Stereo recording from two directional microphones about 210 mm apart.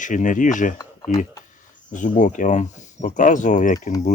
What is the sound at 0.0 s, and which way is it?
Speech, 35° left (ahead or behind).